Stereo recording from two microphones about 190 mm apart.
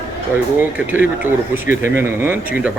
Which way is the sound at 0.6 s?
10° right (ahead or behind).